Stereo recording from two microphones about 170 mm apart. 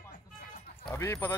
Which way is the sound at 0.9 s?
15° left (ahead or behind).